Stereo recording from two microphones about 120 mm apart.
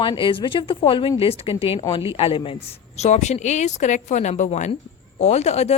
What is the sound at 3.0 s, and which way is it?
A woman's voice, 70° left (ahead or behind).